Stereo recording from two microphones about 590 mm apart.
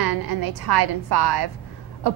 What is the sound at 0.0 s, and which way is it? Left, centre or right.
A woman's voice, right.